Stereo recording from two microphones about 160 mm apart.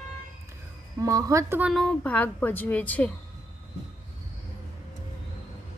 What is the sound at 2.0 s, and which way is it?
A woman's voice, 10° left (ahead or behind).